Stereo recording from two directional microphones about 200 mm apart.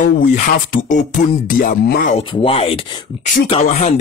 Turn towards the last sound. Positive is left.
turn(degrees=35)  # may be behind; listen again after turning